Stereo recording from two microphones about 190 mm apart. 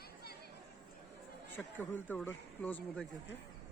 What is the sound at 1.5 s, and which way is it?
Speech, 10° left (ahead or behind).